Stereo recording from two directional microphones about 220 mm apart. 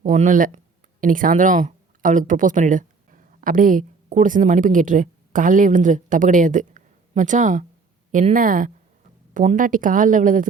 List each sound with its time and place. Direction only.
0.0 s speech: 35° right (ahead or behind)